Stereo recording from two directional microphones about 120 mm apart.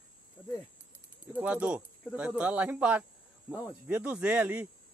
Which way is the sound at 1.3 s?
10° right (ahead or behind).